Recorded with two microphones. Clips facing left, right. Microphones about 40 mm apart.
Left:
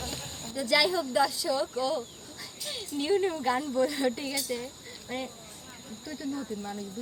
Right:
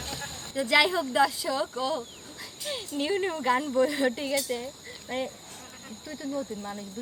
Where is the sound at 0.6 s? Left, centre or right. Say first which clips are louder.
Right 3 dB; right.